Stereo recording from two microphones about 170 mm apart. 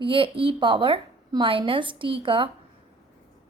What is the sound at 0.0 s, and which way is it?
A woman's voice, 30° right (ahead or behind).